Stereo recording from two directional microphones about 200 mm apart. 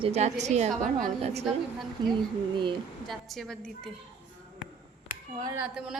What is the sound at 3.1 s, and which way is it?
Speech, centre (ahead or behind).